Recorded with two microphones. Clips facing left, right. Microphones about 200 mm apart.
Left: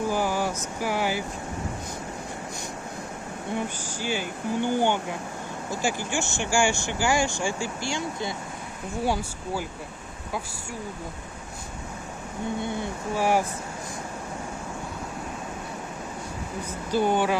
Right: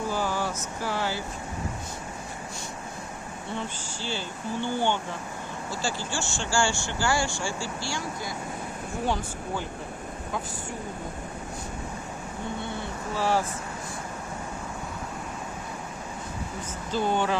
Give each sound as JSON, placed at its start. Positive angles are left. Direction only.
{"t": 0.1, "sound": "a sound", "side_deg": 15}
{"t": 3.5, "sound": "speech", "side_deg": 15}
{"t": 9.0, "sound": "speech", "side_deg": 10}
{"t": 12.6, "sound": "speech", "side_deg": 15}
{"t": 16.9, "sound": "speech", "side_deg": 10}